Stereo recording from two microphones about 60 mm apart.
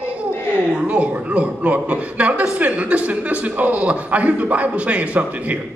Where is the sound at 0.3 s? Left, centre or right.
Left.